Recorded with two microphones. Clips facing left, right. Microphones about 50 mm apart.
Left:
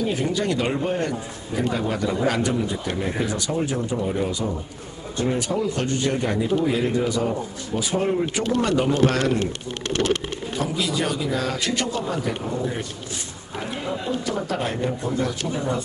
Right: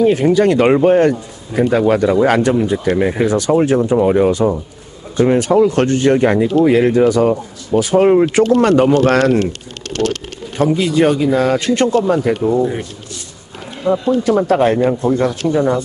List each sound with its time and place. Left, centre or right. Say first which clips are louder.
0.1 s speech: right 11 dB; right
10.6 s speech: right 12 dB; right
13.8 s speech: right 15 dB; right